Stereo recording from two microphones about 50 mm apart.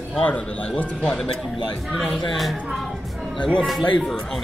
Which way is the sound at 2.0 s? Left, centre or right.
Centre.